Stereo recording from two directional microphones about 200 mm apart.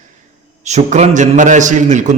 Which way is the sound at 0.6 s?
35° right (ahead or behind).